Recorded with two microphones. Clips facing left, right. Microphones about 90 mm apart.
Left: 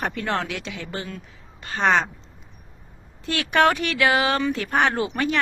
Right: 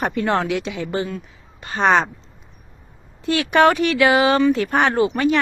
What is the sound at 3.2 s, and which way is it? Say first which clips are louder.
Speech: right 4 dB; 5° right (ahead or behind).